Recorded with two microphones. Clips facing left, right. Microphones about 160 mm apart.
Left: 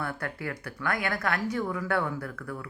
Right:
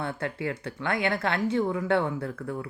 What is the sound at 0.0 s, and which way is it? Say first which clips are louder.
Speech: right 3 dB; 25° right (ahead or behind).